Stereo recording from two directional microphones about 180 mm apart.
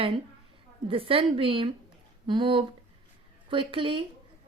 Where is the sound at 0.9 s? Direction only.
30° right (ahead or behind).